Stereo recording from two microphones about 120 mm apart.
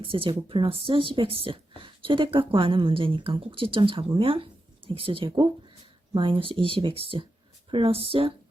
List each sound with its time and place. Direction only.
0.0 s speech: 45° right (ahead or behind)